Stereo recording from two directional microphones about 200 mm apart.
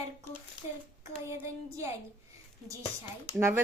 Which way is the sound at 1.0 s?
15° right (ahead or behind).